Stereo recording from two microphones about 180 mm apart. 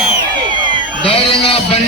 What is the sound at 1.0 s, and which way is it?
Music, 30° left (ahead or behind).